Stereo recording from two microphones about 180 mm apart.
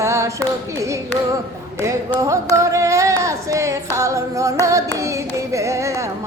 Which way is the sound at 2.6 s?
20° right (ahead or behind).